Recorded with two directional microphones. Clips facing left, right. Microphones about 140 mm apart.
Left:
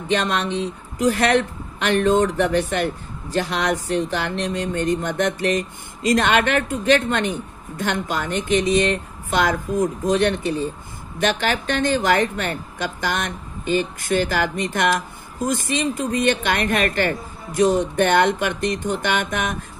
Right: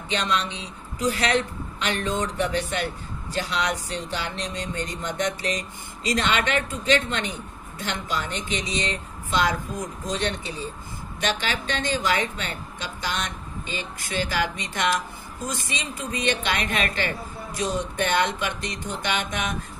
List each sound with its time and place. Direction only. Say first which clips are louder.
0.1 s speech: left 5 dB; 50° left (ahead or behind)